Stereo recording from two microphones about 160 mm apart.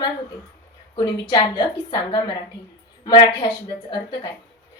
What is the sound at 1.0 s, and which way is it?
A woman's voice, 30° left (ahead or behind).